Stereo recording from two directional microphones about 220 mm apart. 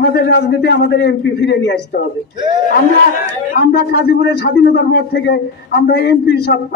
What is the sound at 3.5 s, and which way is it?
A man's voice, 45° left (ahead or behind).